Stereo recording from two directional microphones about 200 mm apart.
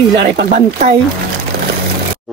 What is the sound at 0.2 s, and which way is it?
Speech, 50° right (ahead or behind).